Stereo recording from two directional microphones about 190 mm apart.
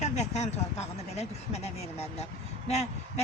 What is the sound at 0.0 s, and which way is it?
Speech, 35° left (ahead or behind).